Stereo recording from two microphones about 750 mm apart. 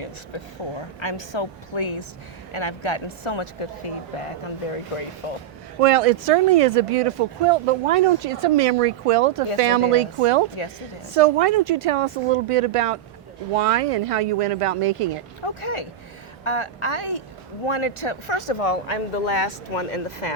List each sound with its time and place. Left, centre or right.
0.8 s speech: left
5.2 s speech: left
5.8 s speech: right
15.4 s speech: left